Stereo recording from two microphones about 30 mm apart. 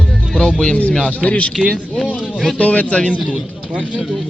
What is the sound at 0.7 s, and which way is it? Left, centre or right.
Speech, left.